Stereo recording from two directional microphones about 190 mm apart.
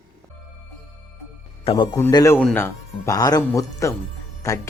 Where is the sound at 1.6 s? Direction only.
25° left (ahead or behind).